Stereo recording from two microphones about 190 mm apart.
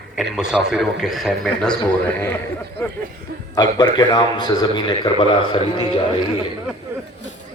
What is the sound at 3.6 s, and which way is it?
A man's voice, 20° left (ahead or behind).